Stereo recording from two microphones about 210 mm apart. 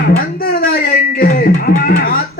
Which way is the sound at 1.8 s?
45° left (ahead or behind).